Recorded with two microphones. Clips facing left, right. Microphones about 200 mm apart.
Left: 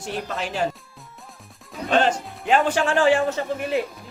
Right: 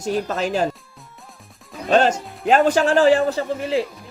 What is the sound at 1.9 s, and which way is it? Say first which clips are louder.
A man's voice: right 4 dB; 40° right (ahead or behind).